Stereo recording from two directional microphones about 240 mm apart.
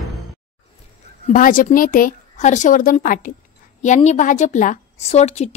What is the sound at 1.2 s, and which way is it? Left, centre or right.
A woman's voice, left.